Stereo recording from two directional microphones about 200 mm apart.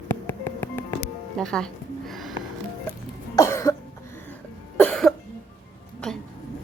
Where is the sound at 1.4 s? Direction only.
5° left (ahead or behind).